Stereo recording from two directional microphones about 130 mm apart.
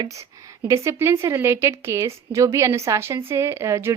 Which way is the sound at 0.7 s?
20° right (ahead or behind).